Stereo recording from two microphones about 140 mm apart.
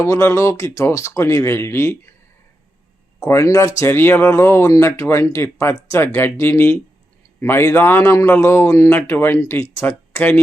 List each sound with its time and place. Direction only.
0.0 s speech: 20° left (ahead or behind)
3.2 s a man's voice: 20° left (ahead or behind)